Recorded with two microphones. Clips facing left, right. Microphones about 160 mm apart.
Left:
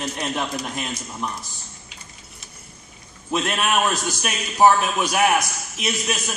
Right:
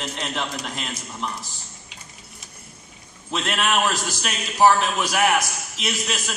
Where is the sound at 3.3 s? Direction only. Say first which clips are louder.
Left 1 dB; 15° left (ahead or behind).